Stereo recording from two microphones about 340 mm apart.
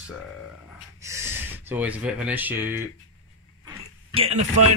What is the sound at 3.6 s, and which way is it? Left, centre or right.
Throat clearing, centre.